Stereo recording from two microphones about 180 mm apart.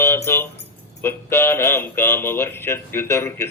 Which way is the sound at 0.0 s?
15° left (ahead or behind).